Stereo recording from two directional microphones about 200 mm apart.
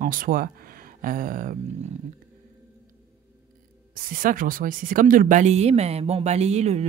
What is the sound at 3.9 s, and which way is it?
Speech, 45° right (ahead or behind).